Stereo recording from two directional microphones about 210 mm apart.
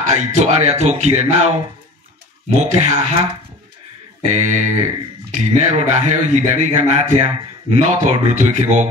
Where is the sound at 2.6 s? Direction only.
30° right (ahead or behind).